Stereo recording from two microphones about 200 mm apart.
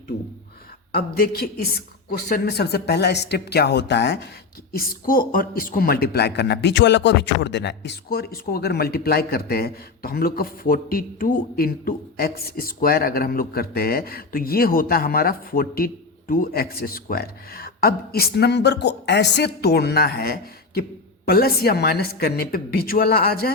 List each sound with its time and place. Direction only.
0.9 s speech: 50° left (ahead or behind)
4.7 s speech: 45° left (ahead or behind)